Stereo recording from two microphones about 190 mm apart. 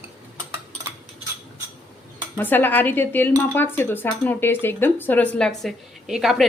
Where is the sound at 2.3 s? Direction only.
10° left (ahead or behind).